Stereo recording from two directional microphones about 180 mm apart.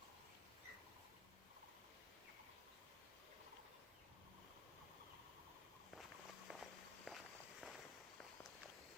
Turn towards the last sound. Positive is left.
turn(degrees=0)  # may be behind; listen again after turning